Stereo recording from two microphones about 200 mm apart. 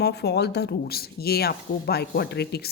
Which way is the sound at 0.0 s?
55° left (ahead or behind).